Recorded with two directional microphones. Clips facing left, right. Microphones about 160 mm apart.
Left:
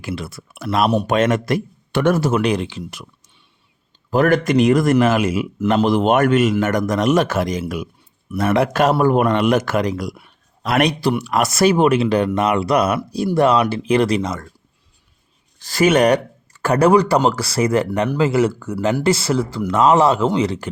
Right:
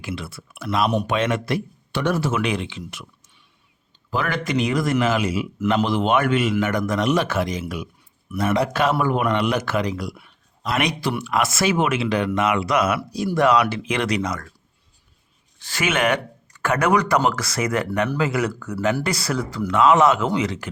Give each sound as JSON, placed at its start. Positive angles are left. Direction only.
{"t": 0.0, "sound": "a man's voice", "side_deg": 40}
{"t": 0.9, "sound": "speech", "side_deg": 35}
{"t": 1.1, "sound": "a man's voice", "side_deg": 45}
{"t": 4.1, "sound": "a man's voice", "side_deg": 45}
{"t": 15.5, "sound": "speech", "side_deg": 40}